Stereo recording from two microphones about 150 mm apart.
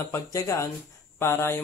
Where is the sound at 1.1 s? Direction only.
15° left (ahead or behind).